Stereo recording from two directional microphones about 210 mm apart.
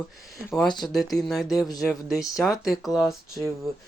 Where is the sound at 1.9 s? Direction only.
Centre (ahead or behind).